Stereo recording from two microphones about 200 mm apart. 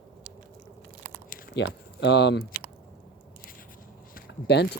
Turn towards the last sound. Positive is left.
turn(degrees=55)  # may be behind; listen again after turning